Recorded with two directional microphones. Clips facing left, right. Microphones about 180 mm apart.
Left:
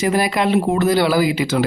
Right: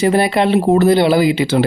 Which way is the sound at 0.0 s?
30° right (ahead or behind).